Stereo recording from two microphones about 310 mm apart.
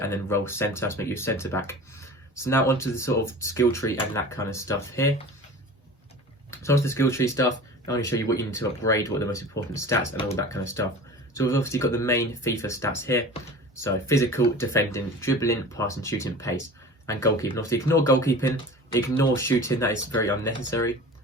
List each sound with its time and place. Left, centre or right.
0.0 s speech: centre
6.5 s speech: centre